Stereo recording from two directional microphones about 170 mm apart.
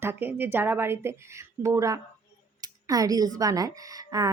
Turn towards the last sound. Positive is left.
turn(degrees=-20)  # may be behind; listen again after turning